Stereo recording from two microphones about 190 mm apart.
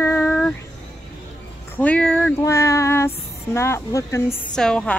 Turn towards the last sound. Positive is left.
turn(degrees=5)  # may be behind; listen again after turning